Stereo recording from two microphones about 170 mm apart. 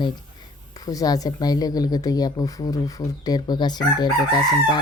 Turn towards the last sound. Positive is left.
turn(degrees=25)  # may be behind; listen again after turning